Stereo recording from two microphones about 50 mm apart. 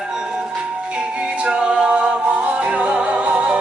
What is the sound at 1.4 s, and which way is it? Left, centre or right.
Music, centre.